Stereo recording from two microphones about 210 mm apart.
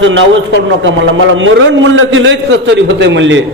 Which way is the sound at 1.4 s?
65° right (ahead or behind).